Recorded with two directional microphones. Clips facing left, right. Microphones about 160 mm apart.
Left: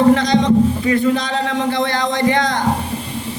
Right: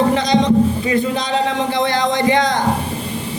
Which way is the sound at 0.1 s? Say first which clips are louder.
Left 1 dB; 20° right (ahead or behind).